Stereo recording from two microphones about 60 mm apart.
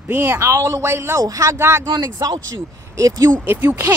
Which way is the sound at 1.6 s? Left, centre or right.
Right.